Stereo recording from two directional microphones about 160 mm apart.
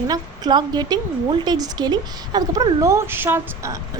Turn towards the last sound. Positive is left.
turn(degrees=-15)  # may be behind; listen again after turning